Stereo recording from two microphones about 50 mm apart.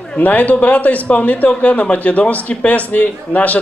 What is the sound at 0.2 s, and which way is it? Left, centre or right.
A man's voice, left.